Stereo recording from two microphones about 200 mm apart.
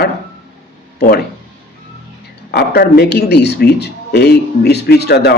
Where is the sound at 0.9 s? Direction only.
50° left (ahead or behind).